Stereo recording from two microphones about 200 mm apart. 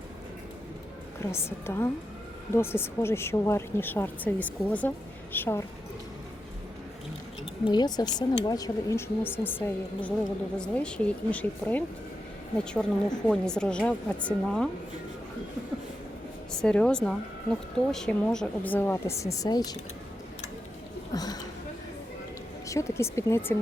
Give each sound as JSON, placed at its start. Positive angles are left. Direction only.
{"t": 1.3, "sound": "a woman's voice", "side_deg": 10}
{"t": 7.6, "sound": "a woman's voice", "side_deg": 20}
{"t": 16.5, "sound": "a woman's voice", "side_deg": 5}
{"t": 21.1, "sound": "a sound", "side_deg": 20}
{"t": 22.6, "sound": "a woman's voice", "side_deg": 15}